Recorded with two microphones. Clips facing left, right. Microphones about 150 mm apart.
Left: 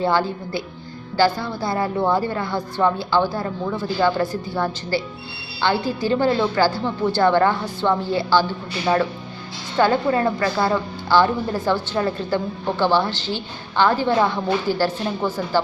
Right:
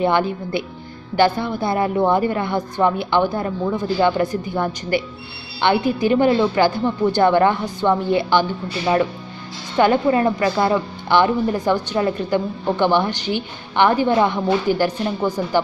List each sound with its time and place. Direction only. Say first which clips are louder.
0.0 s a woman's voice: right 2 dB; 20° right (ahead or behind)
9.8 s a woman's voice: right 2 dB; 20° right (ahead or behind)